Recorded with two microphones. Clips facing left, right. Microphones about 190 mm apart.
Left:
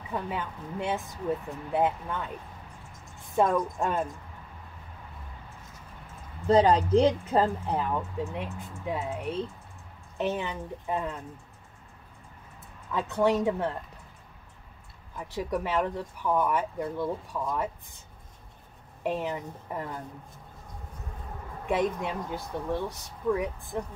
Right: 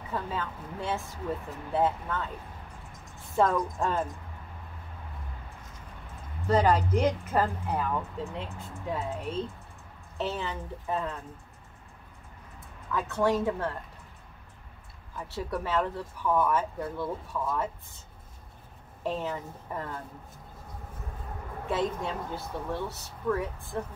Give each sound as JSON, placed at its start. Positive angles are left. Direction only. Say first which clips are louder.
{"t": 0.1, "sound": "speech", "louder": "left 1 dB", "side_deg": 20}
{"t": 3.3, "sound": "speech", "louder": "left 1 dB", "side_deg": 15}
{"t": 6.4, "sound": "speech", "louder": "left 3 dB", "side_deg": 30}
{"t": 12.9, "sound": "speech", "louder": "left 2 dB", "side_deg": 15}
{"t": 15.1, "sound": "speech", "louder": "left 3 dB", "side_deg": 15}
{"t": 19.0, "sound": "speech", "louder": "left 2 dB", "side_deg": 15}
{"t": 21.6, "sound": "speech", "louder": "left 2 dB", "side_deg": 15}